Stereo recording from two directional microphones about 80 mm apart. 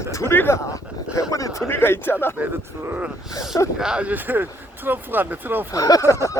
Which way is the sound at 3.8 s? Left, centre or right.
Centre.